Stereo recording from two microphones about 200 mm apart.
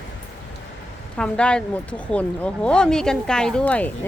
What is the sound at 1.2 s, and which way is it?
Speech, 5° left (ahead or behind).